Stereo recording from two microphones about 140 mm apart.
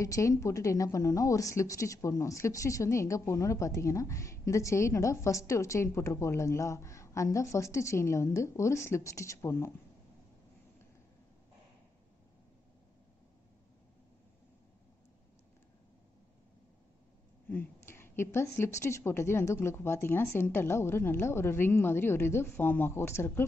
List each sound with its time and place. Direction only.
0.0 s a woman's voice: 25° left (ahead or behind)
17.5 s a woman's voice: 15° left (ahead or behind)